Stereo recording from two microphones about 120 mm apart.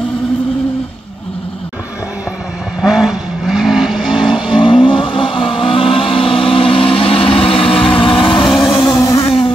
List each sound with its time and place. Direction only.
2.8 s vehicle: 5° right (ahead or behind)
4.5 s vehicle: 45° left (ahead or behind)
8.8 s vehicle: 30° left (ahead or behind)